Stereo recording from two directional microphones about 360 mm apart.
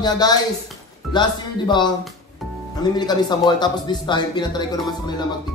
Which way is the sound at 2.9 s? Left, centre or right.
Centre.